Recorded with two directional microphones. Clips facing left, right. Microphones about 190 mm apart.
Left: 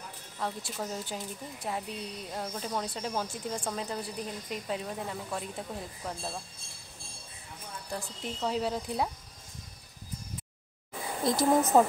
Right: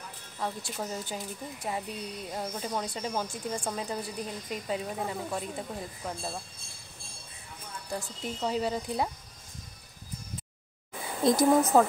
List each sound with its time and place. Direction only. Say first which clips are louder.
0.4 s speech: right 1 dB; centre (ahead or behind)
7.9 s speech: right 2 dB; 5° right (ahead or behind)
11.3 s a woman's voice: right 5 dB; 20° right (ahead or behind)
11.7 s speech: left 1 dB; 5° right (ahead or behind)